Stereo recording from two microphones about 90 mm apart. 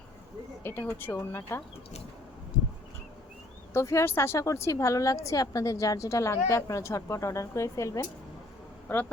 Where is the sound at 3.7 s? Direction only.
35° left (ahead or behind).